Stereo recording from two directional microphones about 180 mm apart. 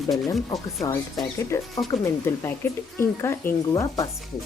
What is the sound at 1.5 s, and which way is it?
Speech, 15° left (ahead or behind).